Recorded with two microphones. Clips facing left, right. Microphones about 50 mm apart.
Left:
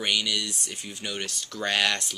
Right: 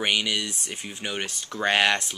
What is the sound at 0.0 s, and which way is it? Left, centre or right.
Speech, right.